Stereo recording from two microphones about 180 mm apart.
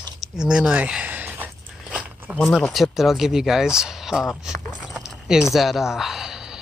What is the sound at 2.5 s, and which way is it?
Speech, centre (ahead or behind).